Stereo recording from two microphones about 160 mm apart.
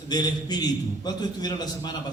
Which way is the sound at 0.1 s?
25° left (ahead or behind).